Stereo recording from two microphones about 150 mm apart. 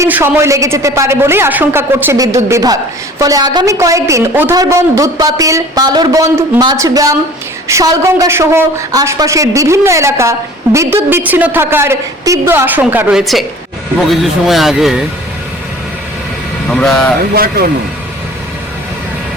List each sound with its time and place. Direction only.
0.0 s a woman's voice: 15° right (ahead or behind)
16.6 s speech: 5° left (ahead or behind)
17.3 s speech: 80° right